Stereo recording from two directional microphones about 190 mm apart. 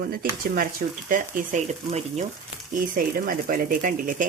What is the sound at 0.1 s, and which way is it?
Speech, 50° right (ahead or behind).